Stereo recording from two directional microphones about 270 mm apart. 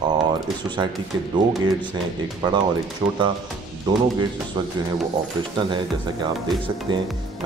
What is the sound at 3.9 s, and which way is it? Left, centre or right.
Speech, centre.